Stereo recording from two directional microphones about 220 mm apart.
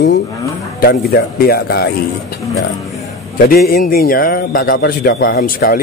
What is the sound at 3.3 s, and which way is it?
A man's voice, 45° left (ahead or behind).